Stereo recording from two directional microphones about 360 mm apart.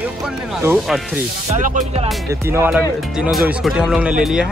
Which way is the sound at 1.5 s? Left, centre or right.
Centre.